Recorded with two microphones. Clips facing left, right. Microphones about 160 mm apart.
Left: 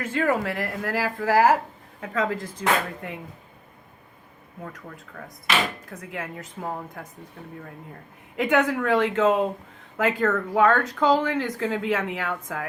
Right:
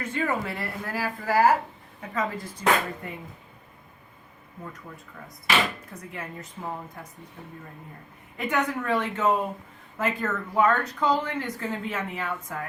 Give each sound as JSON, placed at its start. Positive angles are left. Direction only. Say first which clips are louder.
{"t": 0.1, "sound": "speech", "louder": "left 5 dB", "side_deg": 90}
{"t": 4.6, "sound": "a woman's voice", "louder": "left 2 dB", "side_deg": 60}
{"t": 6.0, "sound": "a woman's voice", "louder": "left 4 dB", "side_deg": 90}
{"t": 8.4, "sound": "speech", "louder": "left 5 dB", "side_deg": 90}
{"t": 10.0, "sound": "speech", "louder": "left 5 dB", "side_deg": 70}